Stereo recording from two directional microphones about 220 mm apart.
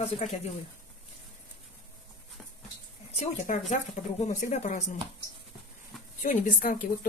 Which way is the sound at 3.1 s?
35° left (ahead or behind).